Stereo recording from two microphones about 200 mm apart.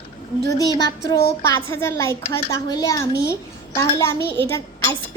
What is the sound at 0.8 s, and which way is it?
A woman's voice, 15° left (ahead or behind).